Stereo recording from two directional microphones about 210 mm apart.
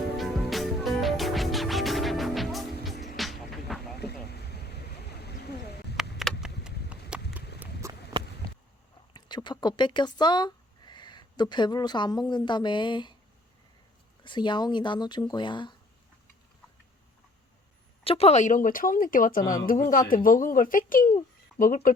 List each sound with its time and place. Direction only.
0.2 s music: centre (ahead or behind)
4.0 s a sound: 50° left (ahead or behind)
6.0 s a sound: centre (ahead or behind)
7.6 s horse: 15° right (ahead or behind)
9.1 s speech: 20° left (ahead or behind)
14.3 s speech: 20° left (ahead or behind)
18.0 s speech: 25° left (ahead or behind)